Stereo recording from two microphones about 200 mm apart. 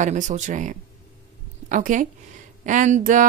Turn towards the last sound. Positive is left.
turn(degrees=-40)  # may be behind; listen again after turning